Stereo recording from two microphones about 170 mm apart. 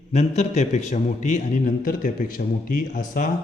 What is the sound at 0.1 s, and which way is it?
A man's voice, 40° left (ahead or behind).